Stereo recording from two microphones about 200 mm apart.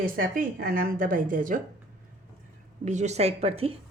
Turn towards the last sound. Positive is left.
turn(degrees=-30)  # may be behind; listen again after turning